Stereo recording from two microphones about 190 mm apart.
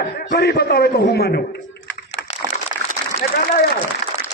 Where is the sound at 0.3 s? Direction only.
60° left (ahead or behind).